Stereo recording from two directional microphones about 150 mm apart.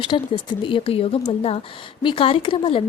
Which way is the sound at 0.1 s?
40° left (ahead or behind).